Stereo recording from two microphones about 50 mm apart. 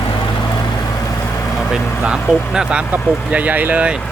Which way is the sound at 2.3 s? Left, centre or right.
Centre.